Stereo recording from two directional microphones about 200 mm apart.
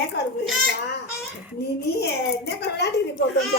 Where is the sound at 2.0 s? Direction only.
55° left (ahead or behind).